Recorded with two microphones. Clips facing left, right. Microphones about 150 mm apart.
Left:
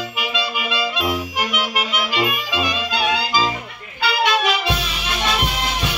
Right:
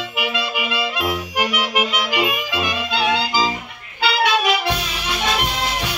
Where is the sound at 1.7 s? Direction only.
20° right (ahead or behind).